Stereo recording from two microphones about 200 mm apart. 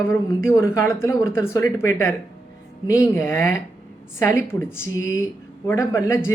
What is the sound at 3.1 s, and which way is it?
A woman's voice, 10° left (ahead or behind).